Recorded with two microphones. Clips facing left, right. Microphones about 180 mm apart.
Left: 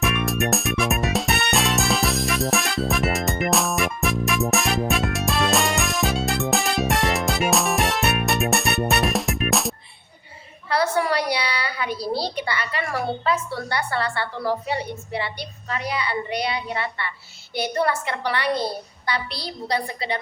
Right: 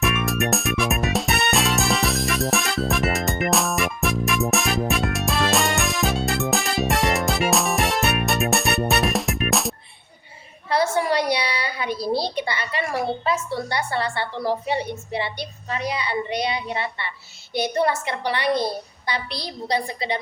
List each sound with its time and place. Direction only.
0.0 s music: centre (ahead or behind)
10.7 s a sound: 20° right (ahead or behind)
17.5 s a woman's voice: 20° right (ahead or behind)